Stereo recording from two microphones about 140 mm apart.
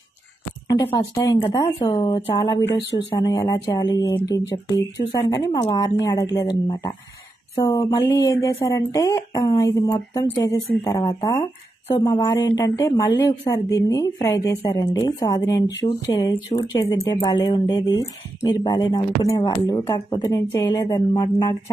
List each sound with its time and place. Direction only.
0.7 s a woman's voice: 30° left (ahead or behind)
2.0 s speech: 40° left (ahead or behind)
2.3 s a woman's voice: 30° left (ahead or behind)
10.5 s speech: 45° left (ahead or behind)
10.9 s a woman's voice: 25° left (ahead or behind)